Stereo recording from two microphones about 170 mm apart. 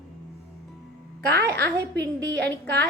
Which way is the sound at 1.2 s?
70° right (ahead or behind).